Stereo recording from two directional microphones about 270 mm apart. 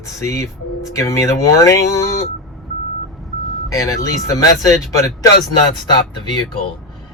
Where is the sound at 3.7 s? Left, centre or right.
Centre.